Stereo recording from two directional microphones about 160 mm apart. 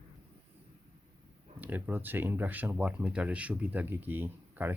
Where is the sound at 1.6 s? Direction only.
10° right (ahead or behind).